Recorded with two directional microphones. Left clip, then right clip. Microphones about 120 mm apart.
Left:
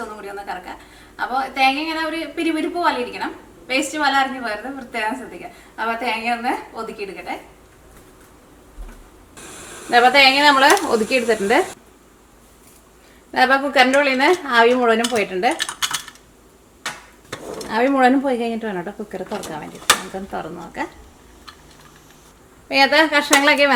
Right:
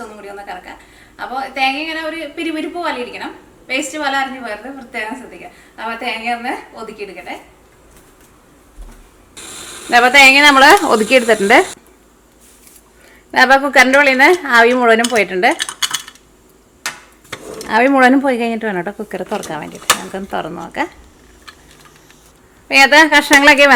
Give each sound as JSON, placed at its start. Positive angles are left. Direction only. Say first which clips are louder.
{"t": 0.0, "sound": "a woman's voice", "louder": "even", "side_deg": 0}
{"t": 9.9, "sound": "a woman's voice", "louder": "right 5 dB", "side_deg": -40}
{"t": 13.3, "sound": "a woman's voice", "louder": "right 6 dB", "side_deg": -40}
{"t": 15.5, "sound": "cutlery", "louder": "right 3 dB", "side_deg": -5}
{"t": 17.7, "sound": "a woman's voice", "louder": "right 5 dB", "side_deg": -40}
{"t": 22.7, "sound": "a woman's voice", "louder": "right 7 dB", "side_deg": -40}